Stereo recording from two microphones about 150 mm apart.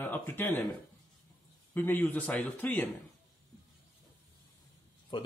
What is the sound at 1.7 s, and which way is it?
A man's voice, 10° left (ahead or behind).